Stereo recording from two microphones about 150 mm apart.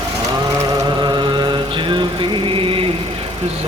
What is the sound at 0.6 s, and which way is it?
Music, 30° right (ahead or behind).